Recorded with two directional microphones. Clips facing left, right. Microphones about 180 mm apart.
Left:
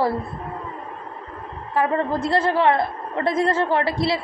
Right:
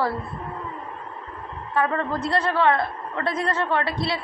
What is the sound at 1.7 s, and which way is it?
A woman's voice, 25° left (ahead or behind).